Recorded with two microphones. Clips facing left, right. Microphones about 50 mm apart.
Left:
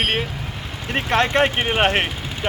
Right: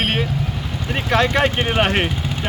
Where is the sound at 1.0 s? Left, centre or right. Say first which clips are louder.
Even; left.